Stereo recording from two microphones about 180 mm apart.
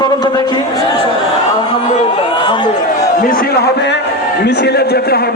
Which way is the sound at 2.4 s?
25° left (ahead or behind).